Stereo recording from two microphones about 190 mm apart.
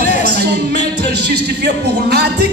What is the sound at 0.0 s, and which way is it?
A man's voice, 55° right (ahead or behind).